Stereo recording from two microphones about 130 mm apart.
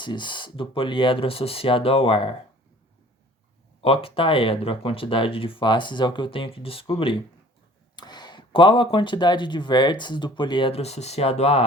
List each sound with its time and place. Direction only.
0.0 s speech: 35° left (ahead or behind)
3.8 s speech: 45° left (ahead or behind)